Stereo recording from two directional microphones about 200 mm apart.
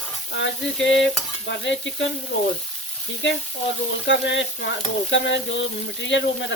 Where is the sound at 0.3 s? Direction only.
65° left (ahead or behind).